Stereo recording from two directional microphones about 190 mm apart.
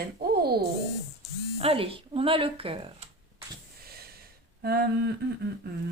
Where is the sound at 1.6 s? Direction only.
30° right (ahead or behind).